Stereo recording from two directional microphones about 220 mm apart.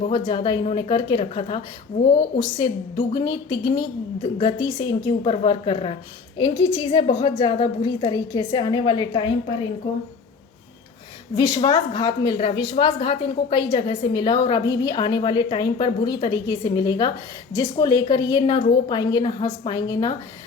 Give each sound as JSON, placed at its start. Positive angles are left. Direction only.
{"t": 0.1, "sound": "a woman's voice", "side_deg": 20}
{"t": 11.3, "sound": "a woman's voice", "side_deg": 20}